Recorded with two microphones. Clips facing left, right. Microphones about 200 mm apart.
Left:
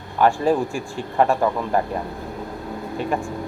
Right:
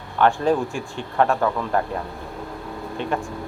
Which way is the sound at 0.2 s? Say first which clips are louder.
Left 1 dB; centre (ahead or behind).